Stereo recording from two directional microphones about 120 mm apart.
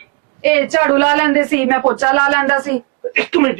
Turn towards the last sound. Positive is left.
turn(degrees=-20)  # may be behind; listen again after turning